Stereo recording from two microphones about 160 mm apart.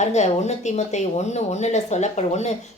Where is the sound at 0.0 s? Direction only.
45° left (ahead or behind).